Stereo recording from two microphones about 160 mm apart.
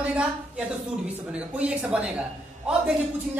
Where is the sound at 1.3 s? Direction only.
10° right (ahead or behind).